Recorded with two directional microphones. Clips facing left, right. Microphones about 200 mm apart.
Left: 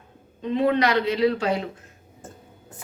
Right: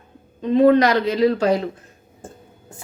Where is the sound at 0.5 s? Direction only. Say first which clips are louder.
Right 7 dB; 40° right (ahead or behind).